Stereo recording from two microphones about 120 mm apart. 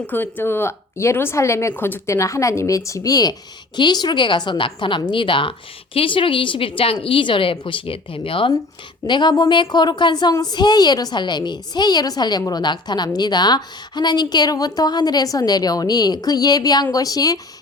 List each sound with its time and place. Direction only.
0.1 s a woman's voice: 15° left (ahead or behind)